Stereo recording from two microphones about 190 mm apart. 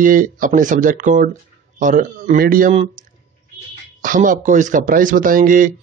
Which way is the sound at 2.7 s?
30° right (ahead or behind).